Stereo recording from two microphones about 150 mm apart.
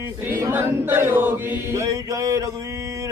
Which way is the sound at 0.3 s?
15° right (ahead or behind).